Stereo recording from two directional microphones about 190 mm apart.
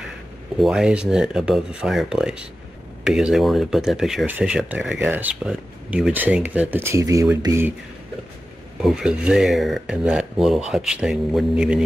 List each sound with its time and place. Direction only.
0.6 s speech: 5° right (ahead or behind)
8.8 s speech: 5° right (ahead or behind)